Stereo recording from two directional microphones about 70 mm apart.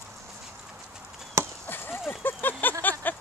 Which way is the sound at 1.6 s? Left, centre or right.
Left.